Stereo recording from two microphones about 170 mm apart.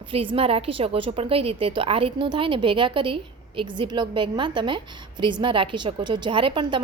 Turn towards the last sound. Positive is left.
turn(degrees=-30)  # may be behind; listen again after turning